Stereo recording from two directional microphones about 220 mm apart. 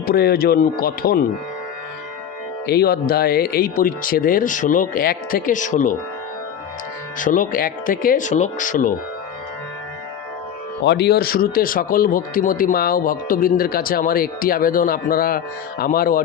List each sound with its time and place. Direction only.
0.0 s speech: 45° left (ahead or behind)
2.6 s a man's voice: 45° left (ahead or behind)
7.2 s a man's voice: 35° left (ahead or behind)
10.8 s a man's voice: 50° left (ahead or behind)